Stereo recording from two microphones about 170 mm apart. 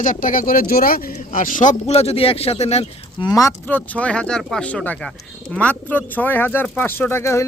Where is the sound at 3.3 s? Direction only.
20° left (ahead or behind).